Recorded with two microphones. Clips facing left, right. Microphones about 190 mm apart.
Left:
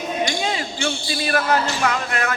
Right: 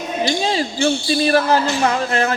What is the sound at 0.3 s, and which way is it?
Speech, 30° right (ahead or behind).